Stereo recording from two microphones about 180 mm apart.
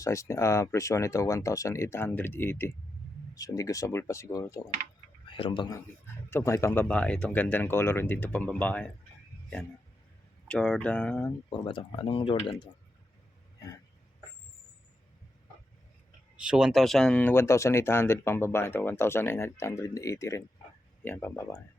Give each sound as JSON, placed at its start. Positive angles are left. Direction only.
{"t": 0.0, "sound": "speech", "side_deg": 15}
{"t": 10.5, "sound": "speech", "side_deg": 5}
{"t": 11.5, "sound": "speech", "side_deg": 30}
{"t": 16.4, "sound": "speech", "side_deg": -5}